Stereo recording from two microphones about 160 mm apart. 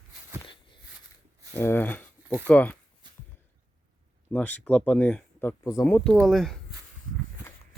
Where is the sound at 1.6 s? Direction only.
15° left (ahead or behind).